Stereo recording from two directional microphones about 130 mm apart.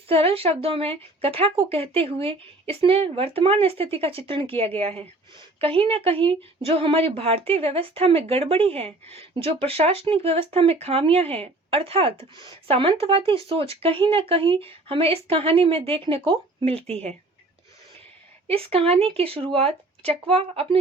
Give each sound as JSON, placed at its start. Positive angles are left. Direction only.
{"t": 0.1, "sound": "a woman's voice", "side_deg": -45}
{"t": 18.4, "sound": "a woman's voice", "side_deg": -50}